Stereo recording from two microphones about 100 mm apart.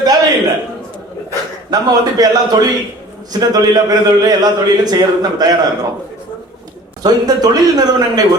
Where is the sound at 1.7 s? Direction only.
40° right (ahead or behind).